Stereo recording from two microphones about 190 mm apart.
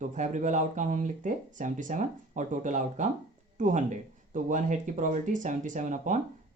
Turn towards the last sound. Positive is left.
turn(degrees=-40)  # may be behind; listen again after turning